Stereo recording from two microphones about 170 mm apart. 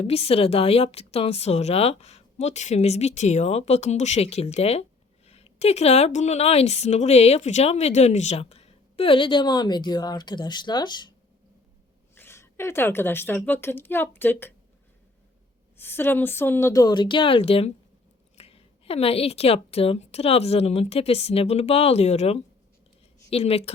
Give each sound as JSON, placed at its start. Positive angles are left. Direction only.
{"t": 0.0, "sound": "speech", "side_deg": 35}
{"t": 12.1, "sound": "a woman's voice", "side_deg": 15}
{"t": 15.8, "sound": "speech", "side_deg": 15}